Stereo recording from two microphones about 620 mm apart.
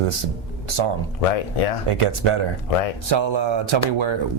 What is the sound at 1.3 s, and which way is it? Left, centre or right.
Speech, left.